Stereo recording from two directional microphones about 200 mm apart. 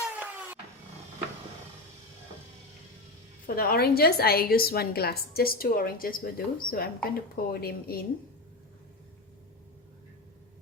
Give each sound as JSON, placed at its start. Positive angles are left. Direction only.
{"t": 0.0, "sound": "vehicle", "side_deg": -5}
{"t": 3.4, "sound": "a woman's voice", "side_deg": 50}